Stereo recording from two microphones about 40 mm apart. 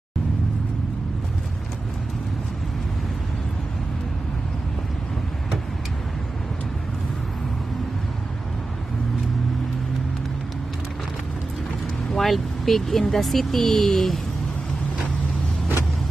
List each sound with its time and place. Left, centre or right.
12.1 s vehicle: centre
13.1 s speech: centre